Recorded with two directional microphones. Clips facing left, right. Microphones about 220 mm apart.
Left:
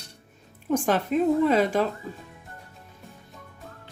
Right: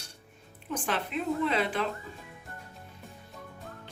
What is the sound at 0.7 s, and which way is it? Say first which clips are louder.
A woman's voice: left 9 dB; 45° left (ahead or behind).